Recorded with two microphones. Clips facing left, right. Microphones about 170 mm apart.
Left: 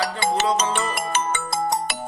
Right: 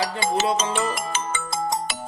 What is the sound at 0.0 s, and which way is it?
Music, 60° left (ahead or behind).